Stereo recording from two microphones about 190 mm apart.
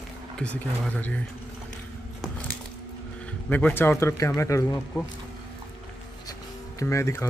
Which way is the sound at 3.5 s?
10° left (ahead or behind).